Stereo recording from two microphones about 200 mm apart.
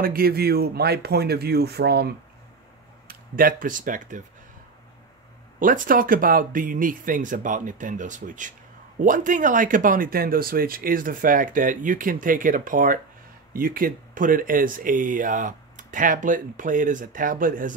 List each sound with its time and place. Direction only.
0.0 s speech: 50° right (ahead or behind)
5.6 s speech: 40° right (ahead or behind)